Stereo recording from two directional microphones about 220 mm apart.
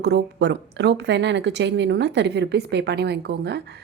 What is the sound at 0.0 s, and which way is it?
A woman's voice, 50° right (ahead or behind).